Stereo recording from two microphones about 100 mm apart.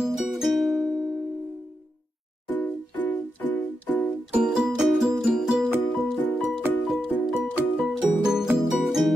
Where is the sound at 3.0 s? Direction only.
20° left (ahead or behind).